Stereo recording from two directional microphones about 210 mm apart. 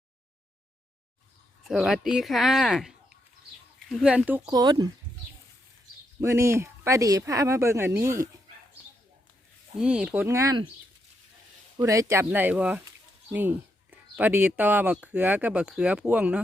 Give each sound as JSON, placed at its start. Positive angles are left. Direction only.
{"t": 1.6, "sound": "speech", "side_deg": 0}
{"t": 6.1, "sound": "speech", "side_deg": -15}
{"t": 9.7, "sound": "speech", "side_deg": -5}
{"t": 11.8, "sound": "speech", "side_deg": -15}